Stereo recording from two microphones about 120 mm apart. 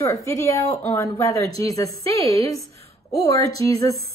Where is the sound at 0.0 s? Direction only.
25° left (ahead or behind).